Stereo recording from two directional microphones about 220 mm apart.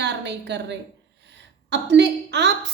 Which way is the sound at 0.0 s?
50° right (ahead or behind).